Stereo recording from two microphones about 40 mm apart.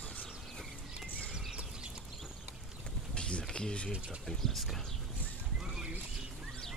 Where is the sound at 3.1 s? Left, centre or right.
Left.